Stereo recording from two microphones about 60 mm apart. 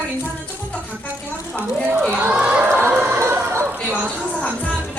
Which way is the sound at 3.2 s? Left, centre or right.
Right.